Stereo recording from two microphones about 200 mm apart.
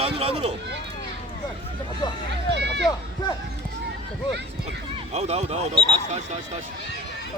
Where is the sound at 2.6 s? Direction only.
60° right (ahead or behind).